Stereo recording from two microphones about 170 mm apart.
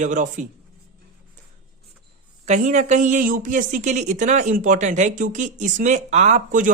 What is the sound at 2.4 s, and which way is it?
A woman's voice, 45° right (ahead or behind).